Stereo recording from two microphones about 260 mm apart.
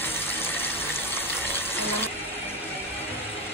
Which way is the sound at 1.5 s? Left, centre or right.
Centre.